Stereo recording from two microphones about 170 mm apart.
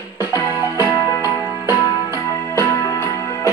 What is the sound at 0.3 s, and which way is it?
Music, 15° left (ahead or behind).